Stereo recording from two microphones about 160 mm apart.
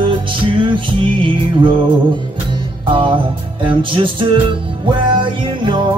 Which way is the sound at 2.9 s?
35° right (ahead or behind).